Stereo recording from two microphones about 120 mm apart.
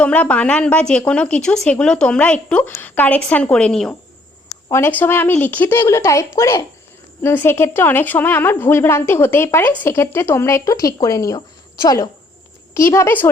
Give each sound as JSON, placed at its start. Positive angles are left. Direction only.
{"t": 0.0, "sound": "a woman's voice", "side_deg": 10}
{"t": 4.7, "sound": "a woman's voice", "side_deg": 15}
{"t": 12.7, "sound": "a woman's voice", "side_deg": 25}